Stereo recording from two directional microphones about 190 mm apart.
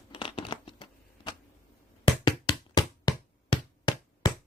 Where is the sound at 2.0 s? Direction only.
20° left (ahead or behind).